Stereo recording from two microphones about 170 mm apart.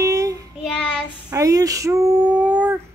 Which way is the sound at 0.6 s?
5° left (ahead or behind).